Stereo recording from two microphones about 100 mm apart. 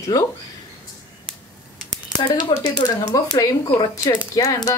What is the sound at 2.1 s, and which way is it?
Speech, 45° left (ahead or behind).